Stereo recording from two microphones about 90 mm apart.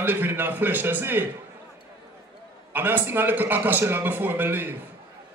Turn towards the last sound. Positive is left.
turn(degrees=-20)  # may be behind; listen again after turning